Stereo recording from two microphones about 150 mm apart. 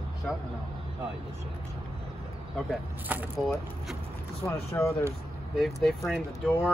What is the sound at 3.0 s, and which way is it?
Speech, 10° right (ahead or behind).